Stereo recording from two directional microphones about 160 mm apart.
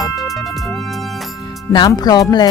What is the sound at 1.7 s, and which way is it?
Speech, 25° left (ahead or behind).